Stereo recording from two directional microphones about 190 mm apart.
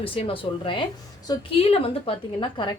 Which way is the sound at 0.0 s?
30° left (ahead or behind).